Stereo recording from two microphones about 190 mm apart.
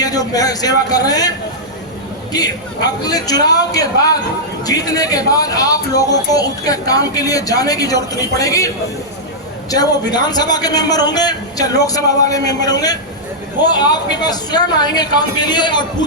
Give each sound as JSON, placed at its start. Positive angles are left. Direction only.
{"t": 0.0, "sound": "a man's voice", "side_deg": 20}
{"t": 2.3, "sound": "a man's voice", "side_deg": 20}